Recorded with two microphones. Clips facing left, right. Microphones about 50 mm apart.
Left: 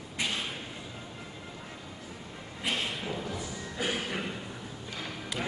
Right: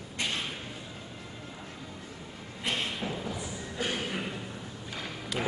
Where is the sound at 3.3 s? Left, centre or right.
Centre.